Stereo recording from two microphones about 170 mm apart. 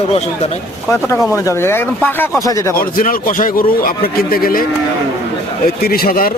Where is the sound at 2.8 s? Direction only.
55° left (ahead or behind).